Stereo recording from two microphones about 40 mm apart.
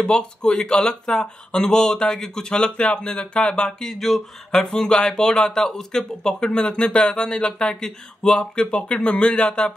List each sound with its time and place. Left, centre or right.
0.0 s speech: left
3.9 s a sound: centre
4.7 s speech: centre